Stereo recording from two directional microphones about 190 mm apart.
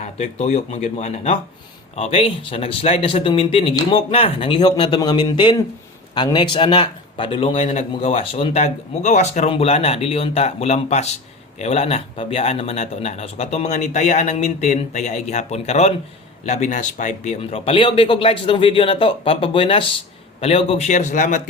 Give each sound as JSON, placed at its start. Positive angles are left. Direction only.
{"t": 0.0, "sound": "a man's voice", "side_deg": 35}